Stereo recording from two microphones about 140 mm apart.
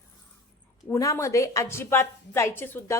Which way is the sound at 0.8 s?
20° left (ahead or behind).